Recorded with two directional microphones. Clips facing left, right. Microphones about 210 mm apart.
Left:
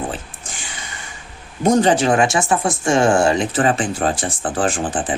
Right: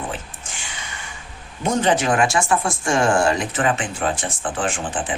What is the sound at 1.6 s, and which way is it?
Speech, 35° left (ahead or behind).